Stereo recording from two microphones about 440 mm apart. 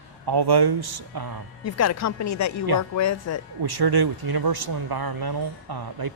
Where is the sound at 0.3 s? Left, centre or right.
Right.